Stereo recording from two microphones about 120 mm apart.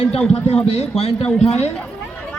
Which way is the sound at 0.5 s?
65° left (ahead or behind).